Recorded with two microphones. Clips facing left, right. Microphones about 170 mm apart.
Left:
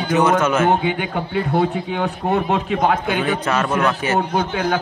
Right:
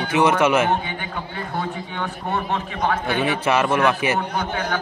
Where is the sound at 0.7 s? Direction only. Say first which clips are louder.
Left 6 dB; 75° left (ahead or behind).